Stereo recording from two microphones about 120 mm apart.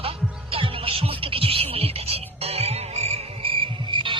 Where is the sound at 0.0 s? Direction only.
50° right (ahead or behind).